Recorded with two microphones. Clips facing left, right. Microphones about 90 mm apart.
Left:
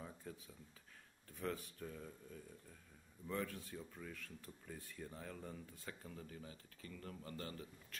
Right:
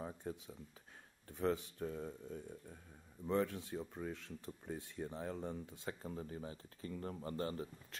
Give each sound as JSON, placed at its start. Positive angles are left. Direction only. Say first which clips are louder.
{"t": 0.2, "sound": "speech", "louder": "right 7 dB", "side_deg": -30}
{"t": 3.7, "sound": "speech", "louder": "right 7 dB", "side_deg": -35}